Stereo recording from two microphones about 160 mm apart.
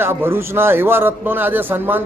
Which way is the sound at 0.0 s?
15° right (ahead or behind).